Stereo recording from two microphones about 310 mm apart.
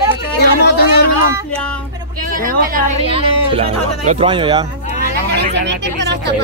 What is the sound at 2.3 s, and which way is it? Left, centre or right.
Speech, right.